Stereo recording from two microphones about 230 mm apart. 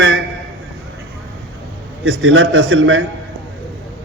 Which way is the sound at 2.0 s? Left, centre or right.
Right.